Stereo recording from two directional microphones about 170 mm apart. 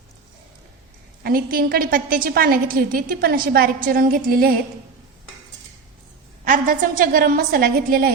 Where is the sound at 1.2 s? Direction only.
60° right (ahead or behind).